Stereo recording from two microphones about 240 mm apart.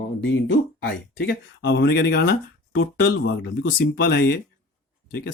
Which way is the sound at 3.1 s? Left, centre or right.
Left.